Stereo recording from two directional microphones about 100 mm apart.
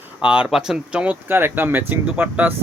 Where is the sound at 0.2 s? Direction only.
10° right (ahead or behind).